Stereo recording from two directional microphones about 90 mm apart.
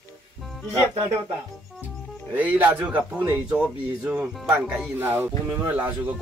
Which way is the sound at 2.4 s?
20° right (ahead or behind).